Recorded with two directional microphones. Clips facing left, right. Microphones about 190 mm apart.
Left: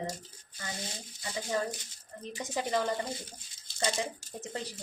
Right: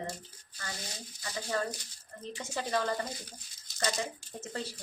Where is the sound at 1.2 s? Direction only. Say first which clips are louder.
Left 1 dB; 20° left (ahead or behind).